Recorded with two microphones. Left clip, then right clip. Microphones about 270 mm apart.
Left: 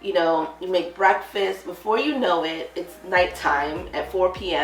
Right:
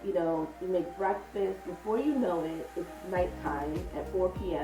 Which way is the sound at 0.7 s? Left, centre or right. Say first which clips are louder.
Left 12 dB; centre.